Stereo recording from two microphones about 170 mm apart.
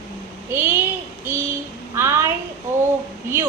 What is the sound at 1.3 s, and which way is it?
Child singing, 15° right (ahead or behind).